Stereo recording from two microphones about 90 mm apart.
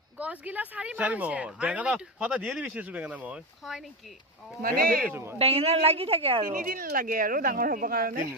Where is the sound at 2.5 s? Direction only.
Centre (ahead or behind).